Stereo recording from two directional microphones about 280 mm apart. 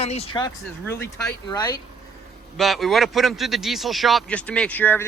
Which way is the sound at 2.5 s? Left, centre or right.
Centre.